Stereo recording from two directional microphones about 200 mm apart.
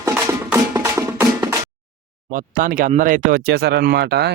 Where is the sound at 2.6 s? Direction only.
40° right (ahead or behind).